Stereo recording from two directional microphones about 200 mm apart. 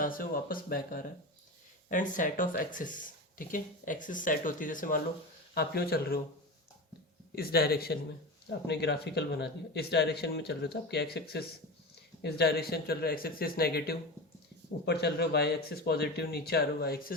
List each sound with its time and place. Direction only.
0.0 s speech: 45° left (ahead or behind)
7.3 s speech: 50° left (ahead or behind)